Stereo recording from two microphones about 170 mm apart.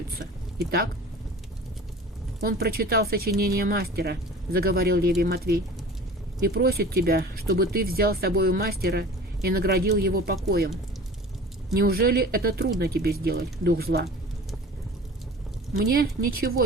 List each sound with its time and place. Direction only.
2.4 s speech: 60° right (ahead or behind)
11.7 s speech: 60° right (ahead or behind)
16.0 s speech: 60° right (ahead or behind)